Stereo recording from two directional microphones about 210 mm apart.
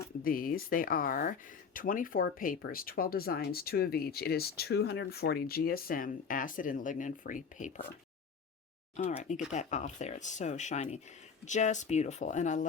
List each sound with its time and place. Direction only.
0.2 s speech: 45° left (ahead or behind)
9.0 s speech: 30° left (ahead or behind)